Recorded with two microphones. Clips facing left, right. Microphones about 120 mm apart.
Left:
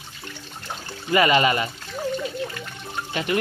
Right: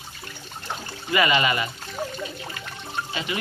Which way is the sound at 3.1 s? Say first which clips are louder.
Left 8 dB; 50° left (ahead or behind).